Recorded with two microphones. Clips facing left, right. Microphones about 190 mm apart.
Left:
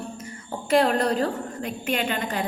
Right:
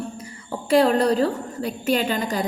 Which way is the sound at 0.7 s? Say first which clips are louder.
Right 3 dB; 35° right (ahead or behind).